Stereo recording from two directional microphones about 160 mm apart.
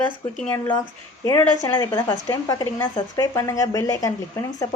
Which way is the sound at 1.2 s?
20° left (ahead or behind).